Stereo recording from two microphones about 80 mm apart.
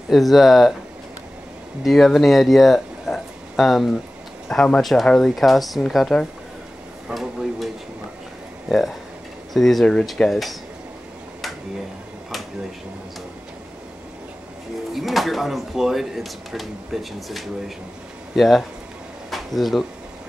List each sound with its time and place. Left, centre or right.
0.1 s speech: centre
1.9 s speech: centre
7.2 s speech: centre
14.9 s speech: centre
19.3 s a sound: centre